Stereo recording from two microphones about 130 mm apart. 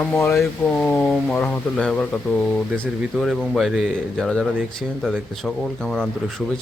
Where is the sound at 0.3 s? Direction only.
5° left (ahead or behind).